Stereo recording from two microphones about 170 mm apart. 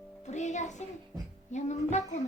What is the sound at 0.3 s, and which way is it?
Music, 45° left (ahead or behind).